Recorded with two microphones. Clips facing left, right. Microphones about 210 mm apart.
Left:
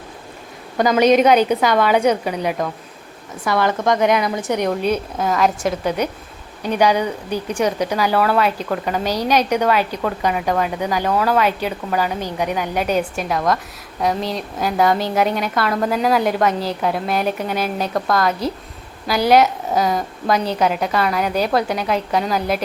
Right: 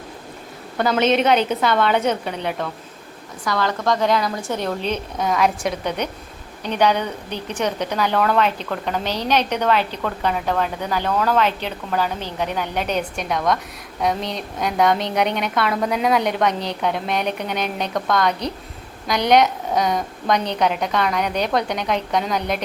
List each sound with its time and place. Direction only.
0.8 s a woman's voice: 10° left (ahead or behind)
3.4 s a woman's voice: 20° left (ahead or behind); by 22.6 s 5° left (ahead or behind)